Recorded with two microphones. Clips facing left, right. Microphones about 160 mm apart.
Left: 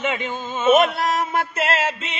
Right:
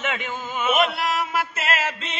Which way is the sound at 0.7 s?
40° left (ahead or behind).